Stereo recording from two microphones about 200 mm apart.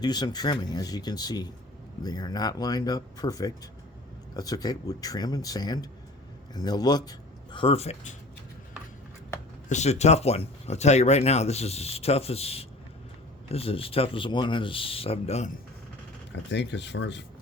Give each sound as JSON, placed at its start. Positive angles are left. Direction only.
{"t": 0.0, "sound": "a man's voice", "side_deg": 20}
{"t": 9.6, "sound": "speech", "side_deg": 35}
{"t": 16.3, "sound": "speech", "side_deg": 60}